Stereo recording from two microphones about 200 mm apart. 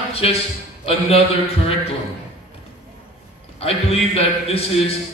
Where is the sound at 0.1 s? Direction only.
30° left (ahead or behind).